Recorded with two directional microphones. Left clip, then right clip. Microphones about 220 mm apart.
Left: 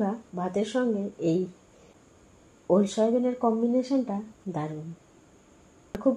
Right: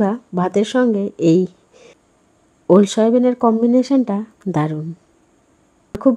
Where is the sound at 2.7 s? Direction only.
55° right (ahead or behind).